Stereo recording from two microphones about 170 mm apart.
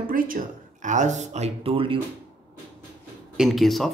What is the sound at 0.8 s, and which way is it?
Speech, 45° right (ahead or behind).